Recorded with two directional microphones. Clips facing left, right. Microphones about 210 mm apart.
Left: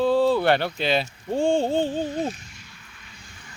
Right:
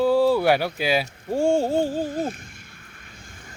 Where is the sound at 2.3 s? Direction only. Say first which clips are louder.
Even; 55° right (ahead or behind).